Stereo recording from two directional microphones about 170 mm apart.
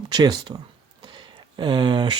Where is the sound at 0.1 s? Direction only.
25° right (ahead or behind).